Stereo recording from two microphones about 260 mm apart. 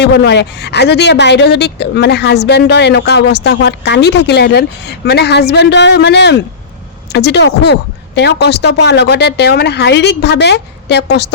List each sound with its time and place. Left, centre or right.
0.0 s speech: left